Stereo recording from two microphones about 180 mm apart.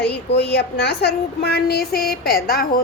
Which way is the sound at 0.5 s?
65° left (ahead or behind).